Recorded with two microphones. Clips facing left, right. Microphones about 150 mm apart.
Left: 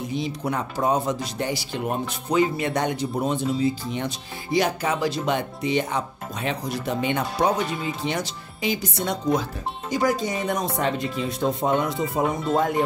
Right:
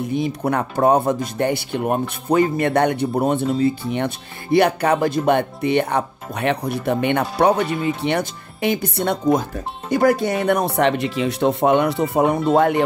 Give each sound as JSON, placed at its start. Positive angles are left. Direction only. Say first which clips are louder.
{"t": 0.1, "sound": "speech", "louder": "right 6 dB", "side_deg": -55}